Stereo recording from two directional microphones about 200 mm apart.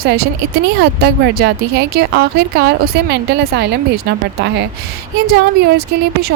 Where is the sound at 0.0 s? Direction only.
50° right (ahead or behind).